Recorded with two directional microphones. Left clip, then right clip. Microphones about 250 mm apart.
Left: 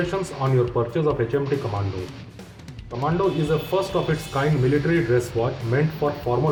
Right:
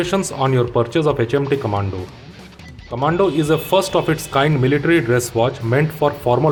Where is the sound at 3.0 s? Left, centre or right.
Right.